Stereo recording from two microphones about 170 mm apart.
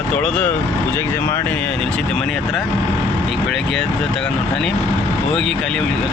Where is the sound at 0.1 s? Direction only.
5° left (ahead or behind).